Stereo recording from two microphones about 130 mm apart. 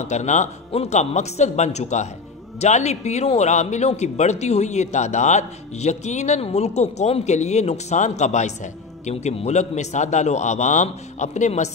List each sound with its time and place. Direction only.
0.0 s a man's voice: 65° left (ahead or behind)
0.7 s a man's voice: 55° left (ahead or behind)